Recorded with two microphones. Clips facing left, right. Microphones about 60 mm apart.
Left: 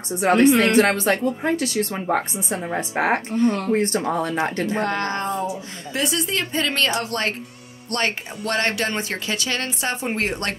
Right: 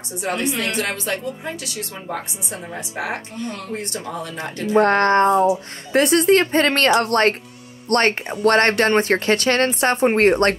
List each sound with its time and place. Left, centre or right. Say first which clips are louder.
0.2 s a woman's voice: left 8 dB; left
4.7 s speech: right 9 dB; right